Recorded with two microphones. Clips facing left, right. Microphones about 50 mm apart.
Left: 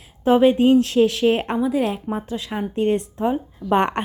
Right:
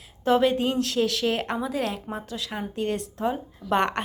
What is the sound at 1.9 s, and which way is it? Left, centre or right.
A woman's voice, centre.